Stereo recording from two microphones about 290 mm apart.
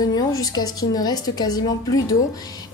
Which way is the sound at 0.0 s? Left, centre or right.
Centre.